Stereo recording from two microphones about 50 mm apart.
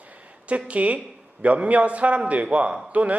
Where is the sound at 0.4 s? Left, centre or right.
Right.